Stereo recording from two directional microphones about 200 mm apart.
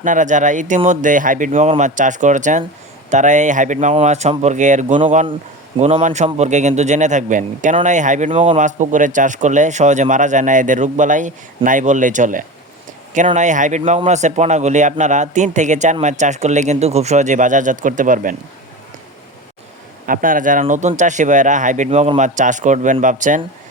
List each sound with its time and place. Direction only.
0.0 s a man's voice: 40° right (ahead or behind)
20.1 s a man's voice: 40° right (ahead or behind)